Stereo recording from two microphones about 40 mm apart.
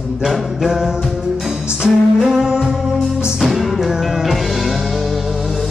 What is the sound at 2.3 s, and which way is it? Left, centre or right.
Music, centre.